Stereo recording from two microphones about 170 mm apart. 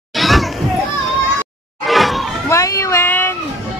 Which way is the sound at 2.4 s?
20° left (ahead or behind).